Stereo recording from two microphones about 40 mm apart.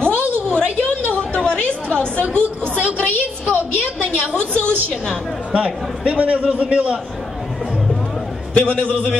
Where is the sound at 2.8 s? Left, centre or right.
Right.